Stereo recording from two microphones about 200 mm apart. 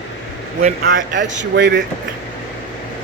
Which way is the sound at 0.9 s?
65° right (ahead or behind).